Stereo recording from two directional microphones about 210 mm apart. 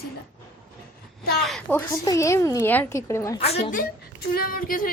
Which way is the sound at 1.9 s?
15° left (ahead or behind).